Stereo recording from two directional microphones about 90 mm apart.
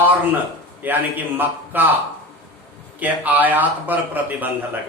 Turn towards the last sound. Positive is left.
turn(degrees=-20)  # may be behind; listen again after turning